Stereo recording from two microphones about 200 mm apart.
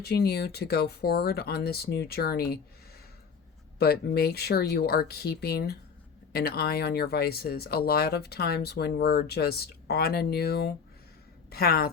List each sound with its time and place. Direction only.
0.0 s speech: 50° left (ahead or behind)
3.8 s speech: 50° left (ahead or behind)